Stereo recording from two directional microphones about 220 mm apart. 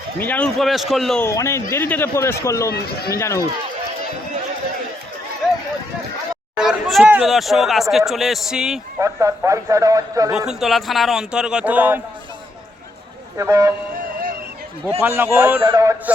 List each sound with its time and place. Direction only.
0.2 s speech: 5° left (ahead or behind)
1.3 s a man's voice: 15° left (ahead or behind)
2.7 s speech: 45° left (ahead or behind)
3.2 s a man's voice: 15° left (ahead or behind)
6.6 s speech: centre (ahead or behind)
9.0 s a man's voice: 15° right (ahead or behind)
10.3 s speech: centre (ahead or behind)
13.3 s a man's voice: 15° right (ahead or behind)
15.0 s a man's voice: 10° right (ahead or behind)